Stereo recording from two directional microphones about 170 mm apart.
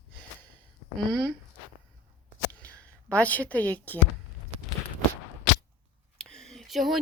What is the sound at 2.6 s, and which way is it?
A woman's voice, 10° left (ahead or behind).